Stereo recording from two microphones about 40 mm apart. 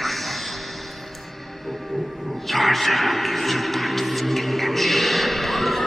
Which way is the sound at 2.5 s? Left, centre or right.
Centre.